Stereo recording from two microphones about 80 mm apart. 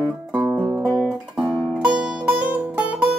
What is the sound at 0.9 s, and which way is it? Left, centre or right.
Guitar, centre.